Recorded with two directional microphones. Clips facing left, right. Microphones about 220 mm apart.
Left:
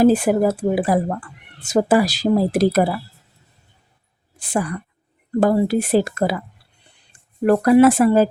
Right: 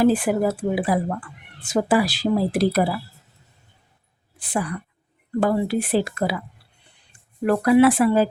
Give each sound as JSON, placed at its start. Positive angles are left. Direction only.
{"t": 0.0, "sound": "speech", "side_deg": 40}
{"t": 4.4, "sound": "a woman's voice", "side_deg": 45}
{"t": 7.4, "sound": "speech", "side_deg": 45}